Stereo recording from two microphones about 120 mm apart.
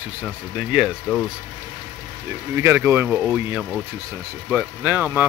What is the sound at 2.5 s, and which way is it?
Speech, 20° right (ahead or behind).